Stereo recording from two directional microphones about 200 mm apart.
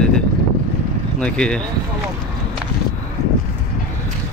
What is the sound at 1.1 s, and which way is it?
Speech, 5° left (ahead or behind).